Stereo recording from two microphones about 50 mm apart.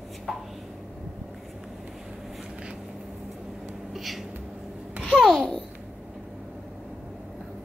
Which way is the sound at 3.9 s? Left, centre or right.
Centre.